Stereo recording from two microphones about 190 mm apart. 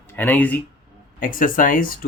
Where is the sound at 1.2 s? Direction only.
45° left (ahead or behind).